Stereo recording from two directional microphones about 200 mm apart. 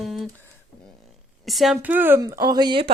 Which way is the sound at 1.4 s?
Centre (ahead or behind).